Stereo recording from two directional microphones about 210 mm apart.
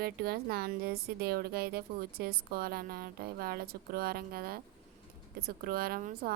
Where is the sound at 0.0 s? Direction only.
45° right (ahead or behind).